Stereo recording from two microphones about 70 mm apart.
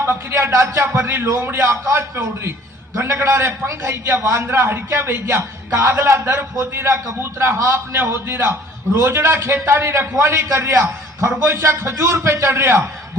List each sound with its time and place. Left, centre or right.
0.0 s a man's voice: right